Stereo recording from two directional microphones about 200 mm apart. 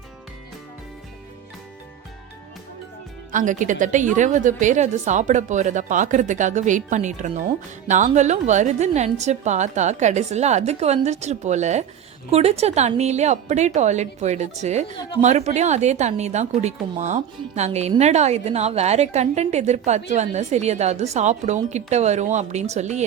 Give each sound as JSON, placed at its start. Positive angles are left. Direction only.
{"t": 3.3, "sound": "a woman's voice", "side_deg": -40}